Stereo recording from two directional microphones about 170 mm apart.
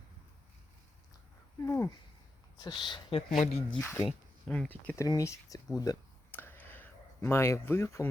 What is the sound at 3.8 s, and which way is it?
Speech, 15° left (ahead or behind).